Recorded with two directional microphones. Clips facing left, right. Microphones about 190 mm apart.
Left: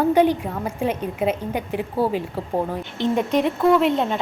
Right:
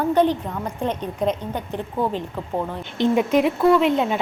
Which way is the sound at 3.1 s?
5° right (ahead or behind).